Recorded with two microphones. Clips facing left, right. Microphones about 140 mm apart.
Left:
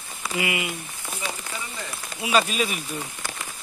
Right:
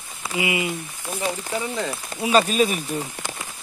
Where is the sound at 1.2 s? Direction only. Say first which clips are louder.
Right 9 dB; 40° right (ahead or behind).